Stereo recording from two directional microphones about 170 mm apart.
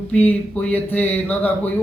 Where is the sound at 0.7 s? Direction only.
10° left (ahead or behind).